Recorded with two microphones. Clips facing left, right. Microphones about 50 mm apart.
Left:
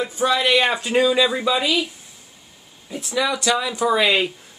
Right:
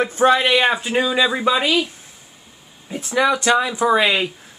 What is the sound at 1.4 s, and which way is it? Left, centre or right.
Speech, right.